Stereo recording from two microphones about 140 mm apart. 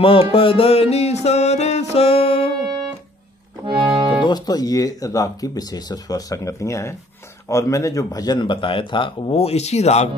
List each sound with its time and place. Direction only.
0.0 s music: 40° left (ahead or behind)
3.6 s music: 35° right (ahead or behind)
4.3 s a man's voice: 30° left (ahead or behind); by 10.0 s 50° left (ahead or behind)